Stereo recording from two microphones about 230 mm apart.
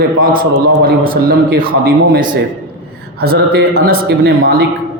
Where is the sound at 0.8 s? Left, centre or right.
Right.